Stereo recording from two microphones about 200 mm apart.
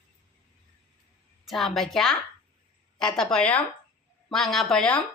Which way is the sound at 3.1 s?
5° left (ahead or behind).